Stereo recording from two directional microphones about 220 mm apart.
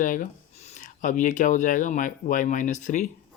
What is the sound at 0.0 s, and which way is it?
Speech, 35° left (ahead or behind).